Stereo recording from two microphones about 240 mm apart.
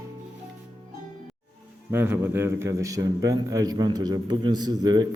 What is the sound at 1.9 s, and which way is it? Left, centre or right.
A man's voice, centre.